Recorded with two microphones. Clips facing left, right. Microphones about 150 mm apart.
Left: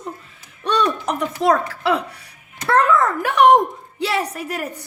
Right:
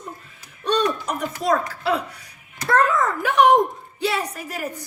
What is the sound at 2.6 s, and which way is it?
A child's voice, 65° left (ahead or behind).